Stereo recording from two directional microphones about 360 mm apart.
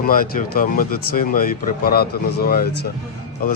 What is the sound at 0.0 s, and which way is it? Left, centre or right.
Speech, left.